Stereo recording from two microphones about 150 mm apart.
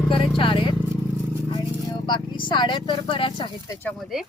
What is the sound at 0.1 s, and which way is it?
Clip-clop, 35° left (ahead or behind).